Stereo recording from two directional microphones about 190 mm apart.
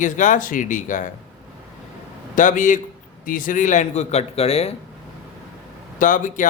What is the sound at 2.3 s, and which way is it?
Speech, 40° left (ahead or behind).